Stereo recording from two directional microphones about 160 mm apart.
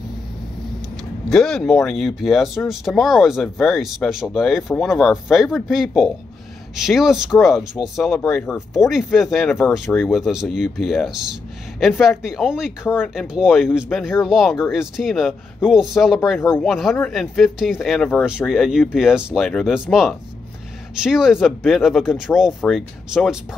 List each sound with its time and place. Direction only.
1.3 s speech: 5° left (ahead or behind)
9.7 s speech: 15° left (ahead or behind)
10.0 s speech: centre (ahead or behind)